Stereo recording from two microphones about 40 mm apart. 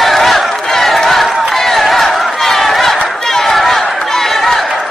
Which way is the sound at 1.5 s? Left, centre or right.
Centre.